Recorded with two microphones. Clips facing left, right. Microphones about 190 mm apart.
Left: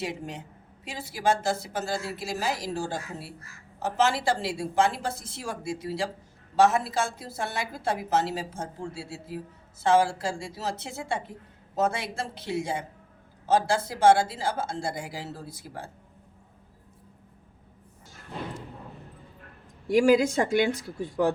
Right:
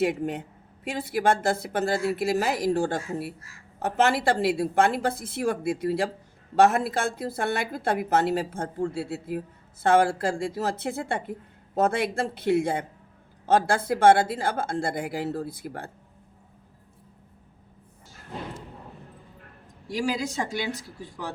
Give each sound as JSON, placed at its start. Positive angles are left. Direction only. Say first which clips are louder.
{"t": 0.0, "sound": "a woman's voice", "louder": "right 9 dB", "side_deg": -55}
{"t": 19.9, "sound": "speech", "louder": "left 8 dB", "side_deg": 50}